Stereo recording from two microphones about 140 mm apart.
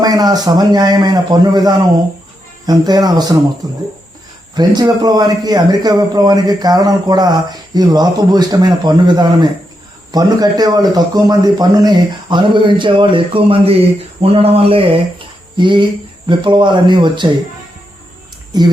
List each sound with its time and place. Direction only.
0.0 s a man's voice: 30° right (ahead or behind)